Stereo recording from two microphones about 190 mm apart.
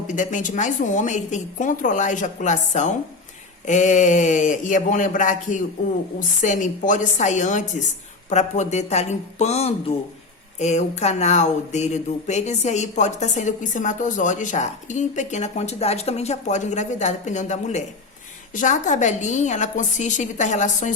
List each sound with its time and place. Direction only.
0.1 s speech: 40° left (ahead or behind)